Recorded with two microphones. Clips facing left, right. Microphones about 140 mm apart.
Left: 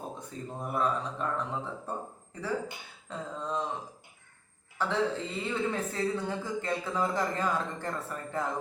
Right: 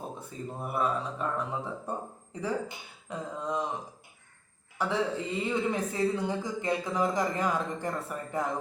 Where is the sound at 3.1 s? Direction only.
10° right (ahead or behind).